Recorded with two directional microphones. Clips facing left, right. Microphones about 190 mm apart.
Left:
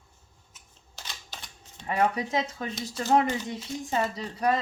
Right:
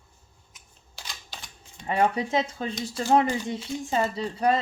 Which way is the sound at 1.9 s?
30° right (ahead or behind).